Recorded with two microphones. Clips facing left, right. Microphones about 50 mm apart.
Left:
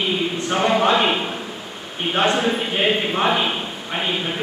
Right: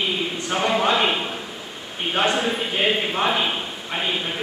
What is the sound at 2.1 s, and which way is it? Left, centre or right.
A man's voice, centre.